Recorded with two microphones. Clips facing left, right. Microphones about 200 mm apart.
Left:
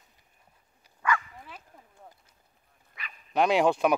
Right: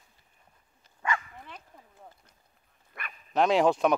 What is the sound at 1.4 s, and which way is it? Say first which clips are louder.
Bow-wow: even; 5° left (ahead or behind).